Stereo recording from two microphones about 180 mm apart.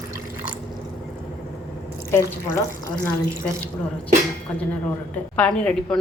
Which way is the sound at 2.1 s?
15° left (ahead or behind).